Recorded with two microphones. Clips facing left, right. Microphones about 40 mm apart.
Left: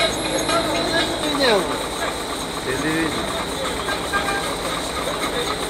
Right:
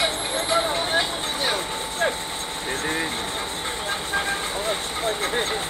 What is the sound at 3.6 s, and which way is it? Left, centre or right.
Vehicle, centre.